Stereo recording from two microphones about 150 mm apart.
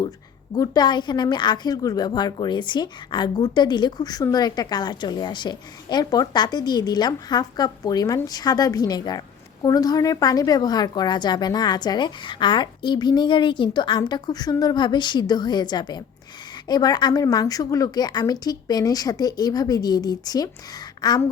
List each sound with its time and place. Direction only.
0.5 s a woman's voice: 25° left (ahead or behind)